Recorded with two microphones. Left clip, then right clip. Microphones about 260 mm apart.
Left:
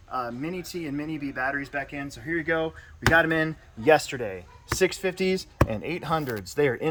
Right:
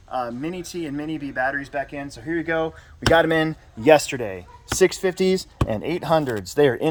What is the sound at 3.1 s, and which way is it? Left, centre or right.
Speech, right.